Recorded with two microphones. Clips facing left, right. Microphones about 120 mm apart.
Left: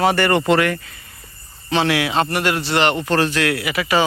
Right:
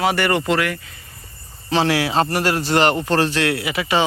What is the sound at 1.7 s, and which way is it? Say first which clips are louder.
A man's voice: even; 35° right (ahead or behind).